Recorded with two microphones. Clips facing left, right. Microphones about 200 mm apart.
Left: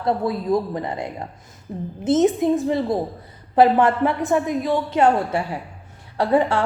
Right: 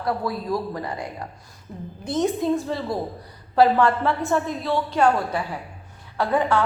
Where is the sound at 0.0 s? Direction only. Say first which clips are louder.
Left 4 dB; 25° left (ahead or behind).